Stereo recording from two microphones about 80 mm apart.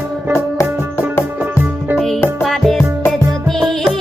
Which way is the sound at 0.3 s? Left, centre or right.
Left.